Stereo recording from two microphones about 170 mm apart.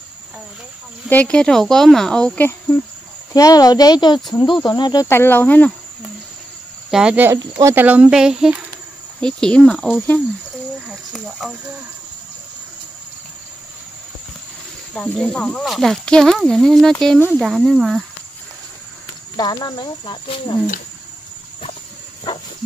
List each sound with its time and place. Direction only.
1.0 s speech: 10° left (ahead or behind)
3.3 s speech: 20° left (ahead or behind)
4.6 s cricket: 25° left (ahead or behind)
6.9 s speech: 5° right (ahead or behind)
7.3 s speech: 25° right (ahead or behind)
7.7 s speech: 10° right (ahead or behind)
15.0 s speech: 5° left (ahead or behind)
19.3 s speech: 25° left (ahead or behind)